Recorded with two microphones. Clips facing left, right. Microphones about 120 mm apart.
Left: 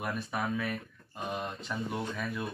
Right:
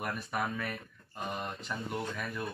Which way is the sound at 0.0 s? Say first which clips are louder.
Left 1 dB; 5° left (ahead or behind).